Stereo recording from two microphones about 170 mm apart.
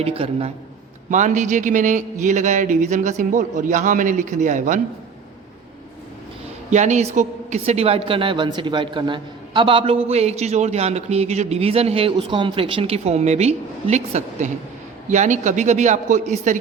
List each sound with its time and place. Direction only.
0.0 s speech: 35° right (ahead or behind)
1.1 s speech: 45° right (ahead or behind)
6.7 s speech: 45° right (ahead or behind)